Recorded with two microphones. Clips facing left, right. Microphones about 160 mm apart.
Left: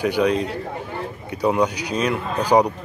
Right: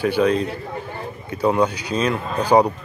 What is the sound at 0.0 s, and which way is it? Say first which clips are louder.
Speech: right 1 dB; 15° left (ahead or behind).